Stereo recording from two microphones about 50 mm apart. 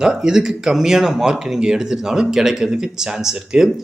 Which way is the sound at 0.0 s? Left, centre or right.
Centre.